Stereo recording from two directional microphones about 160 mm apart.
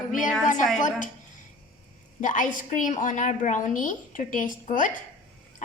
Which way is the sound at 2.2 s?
50° left (ahead or behind).